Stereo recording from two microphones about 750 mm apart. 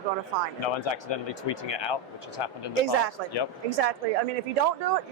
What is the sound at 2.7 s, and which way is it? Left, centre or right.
Speech, right.